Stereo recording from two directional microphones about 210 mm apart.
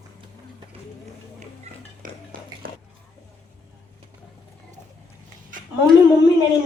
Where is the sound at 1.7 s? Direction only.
30° right (ahead or behind).